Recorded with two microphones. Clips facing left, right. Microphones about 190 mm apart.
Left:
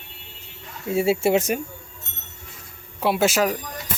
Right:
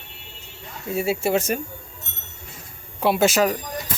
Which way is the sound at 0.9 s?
25° left (ahead or behind).